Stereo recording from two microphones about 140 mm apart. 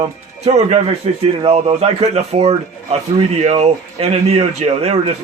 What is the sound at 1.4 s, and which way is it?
Speech, 35° right (ahead or behind).